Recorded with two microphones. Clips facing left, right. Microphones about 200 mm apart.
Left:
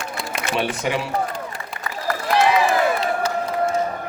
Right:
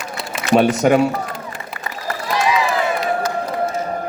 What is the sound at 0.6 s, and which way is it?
Speech, 45° right (ahead or behind).